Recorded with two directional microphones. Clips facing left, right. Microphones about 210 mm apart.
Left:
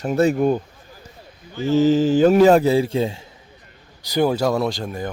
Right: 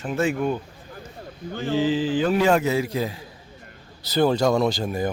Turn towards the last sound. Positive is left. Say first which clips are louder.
# right 1 dB
turn(degrees=-5)  # may be behind; listen again after turning